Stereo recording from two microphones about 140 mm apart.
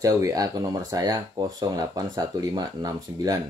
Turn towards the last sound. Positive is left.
turn(degrees=-25)  # may be behind; listen again after turning